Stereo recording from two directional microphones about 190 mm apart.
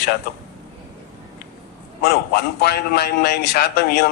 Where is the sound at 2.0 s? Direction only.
60° left (ahead or behind).